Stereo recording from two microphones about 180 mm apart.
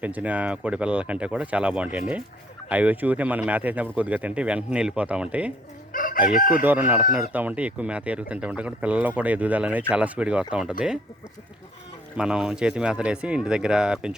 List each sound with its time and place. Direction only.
0.0 s speech: 10° right (ahead or behind)
5.9 s chicken: 50° left (ahead or behind)
6.6 s speech: 10° right (ahead or behind)
12.1 s speech: 5° right (ahead or behind)